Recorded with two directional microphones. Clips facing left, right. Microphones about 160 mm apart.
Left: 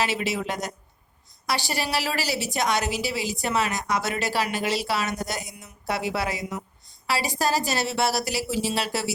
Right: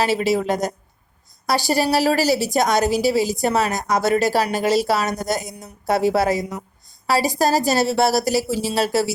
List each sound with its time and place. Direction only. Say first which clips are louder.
0.0 s a woman's voice: right 7 dB; 40° right (ahead or behind)